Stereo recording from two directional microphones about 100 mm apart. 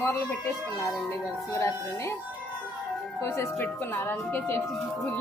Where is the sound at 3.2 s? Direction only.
25° left (ahead or behind).